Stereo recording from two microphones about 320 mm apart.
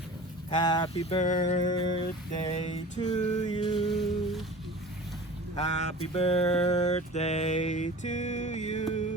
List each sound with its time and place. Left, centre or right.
0.5 s mantra: centre
2.0 s a sound: left
3.9 s humming: centre
5.5 s mantra: left